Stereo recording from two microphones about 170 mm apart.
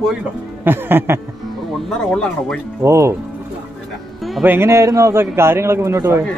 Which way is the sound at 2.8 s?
15° right (ahead or behind).